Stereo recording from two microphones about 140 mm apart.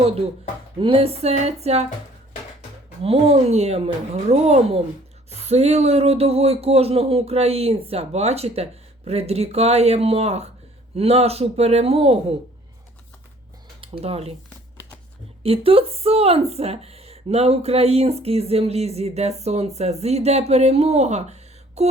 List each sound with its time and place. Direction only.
0.8 s speech: 40° right (ahead or behind)
3.0 s speech: 45° right (ahead or behind)
13.8 s speech: 40° right (ahead or behind)
15.4 s speech: 40° right (ahead or behind)